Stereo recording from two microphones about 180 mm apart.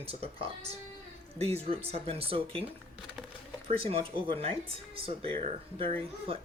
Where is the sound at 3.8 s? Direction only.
30° right (ahead or behind).